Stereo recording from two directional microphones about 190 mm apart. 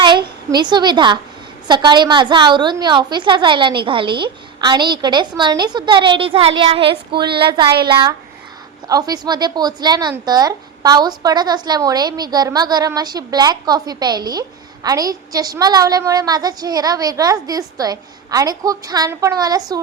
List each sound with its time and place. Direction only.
0.0 s a woman's voice: 25° right (ahead or behind)